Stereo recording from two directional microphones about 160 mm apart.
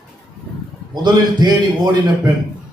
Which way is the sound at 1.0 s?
25° right (ahead or behind).